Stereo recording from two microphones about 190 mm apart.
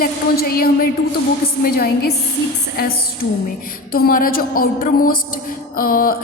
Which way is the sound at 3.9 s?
50° left (ahead or behind).